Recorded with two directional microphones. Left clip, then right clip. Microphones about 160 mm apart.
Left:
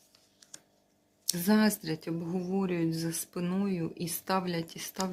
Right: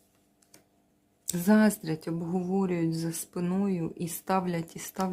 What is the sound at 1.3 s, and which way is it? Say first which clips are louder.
Speech: right 3 dB; 25° right (ahead or behind).